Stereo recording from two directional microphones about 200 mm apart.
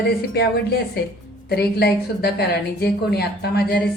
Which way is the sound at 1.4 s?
55° left (ahead or behind).